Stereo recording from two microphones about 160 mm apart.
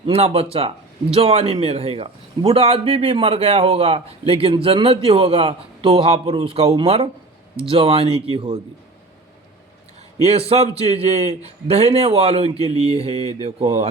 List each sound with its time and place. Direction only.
0.0 s a man's voice: 35° right (ahead or behind)
10.2 s a man's voice: 40° right (ahead or behind)